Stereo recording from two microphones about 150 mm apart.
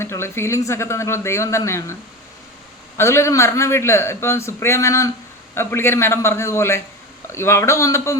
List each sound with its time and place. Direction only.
0.0 s a man's voice: 15° left (ahead or behind)
3.0 s a man's voice: 20° left (ahead or behind)